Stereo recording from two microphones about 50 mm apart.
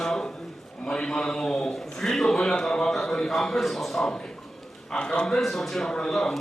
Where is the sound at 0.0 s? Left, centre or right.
Centre.